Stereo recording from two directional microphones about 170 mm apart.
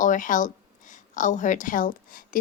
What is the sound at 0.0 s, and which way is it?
A woman's voice, 50° left (ahead or behind).